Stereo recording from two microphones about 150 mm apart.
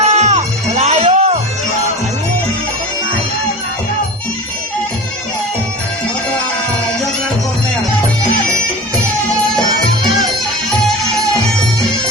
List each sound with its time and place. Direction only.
0.0 s music: 45° right (ahead or behind)